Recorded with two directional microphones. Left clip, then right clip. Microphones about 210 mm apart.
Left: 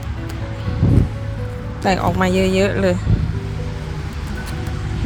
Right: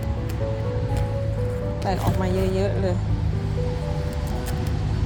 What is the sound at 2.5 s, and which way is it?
Speech, 45° left (ahead or behind).